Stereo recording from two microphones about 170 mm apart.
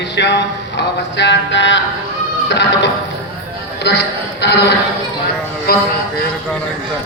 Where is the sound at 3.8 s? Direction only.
85° left.